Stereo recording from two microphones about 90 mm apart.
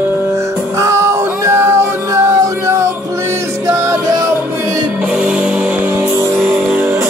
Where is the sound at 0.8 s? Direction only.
35° right (ahead or behind).